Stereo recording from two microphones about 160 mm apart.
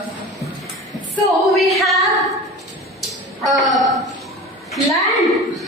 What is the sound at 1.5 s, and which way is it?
Singing, centre (ahead or behind).